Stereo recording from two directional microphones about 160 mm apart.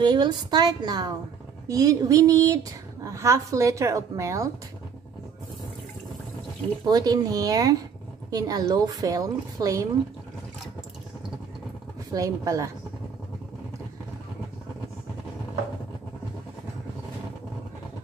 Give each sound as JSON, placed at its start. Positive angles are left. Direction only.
{"t": 0.0, "sound": "a woman's voice", "side_deg": -30}
{"t": 6.9, "sound": "a woman's voice", "side_deg": -25}
{"t": 12.1, "sound": "a woman's voice", "side_deg": -20}